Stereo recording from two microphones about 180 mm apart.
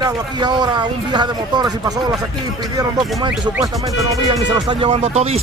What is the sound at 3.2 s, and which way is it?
Speech, 20° right (ahead or behind).